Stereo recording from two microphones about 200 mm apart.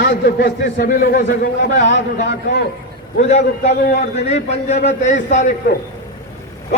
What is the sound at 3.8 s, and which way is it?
Speech, 50° left (ahead or behind).